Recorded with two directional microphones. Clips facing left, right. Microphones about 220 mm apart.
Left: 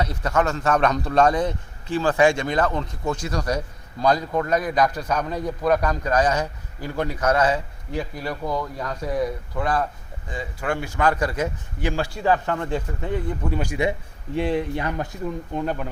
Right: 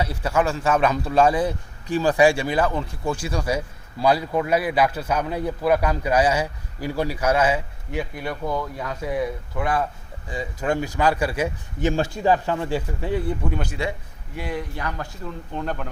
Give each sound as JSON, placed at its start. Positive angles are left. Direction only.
{"t": 0.0, "sound": "a man's voice", "side_deg": -10}
{"t": 10.2, "sound": "a man's voice", "side_deg": -15}
{"t": 11.9, "sound": "a man's voice", "side_deg": -20}
{"t": 13.5, "sound": "speech", "side_deg": 10}
{"t": 14.3, "sound": "speech", "side_deg": 25}